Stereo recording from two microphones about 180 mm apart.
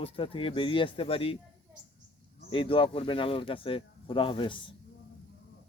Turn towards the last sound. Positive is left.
turn(degrees=30)  # may be behind; listen again after turning